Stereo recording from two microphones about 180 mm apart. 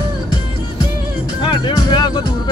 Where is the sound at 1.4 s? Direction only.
25° left (ahead or behind).